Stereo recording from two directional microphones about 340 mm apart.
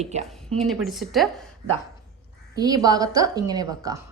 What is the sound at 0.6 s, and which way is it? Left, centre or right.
Speech, centre.